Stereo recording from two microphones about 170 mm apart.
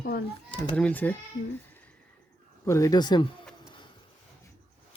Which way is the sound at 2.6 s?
15° left (ahead or behind).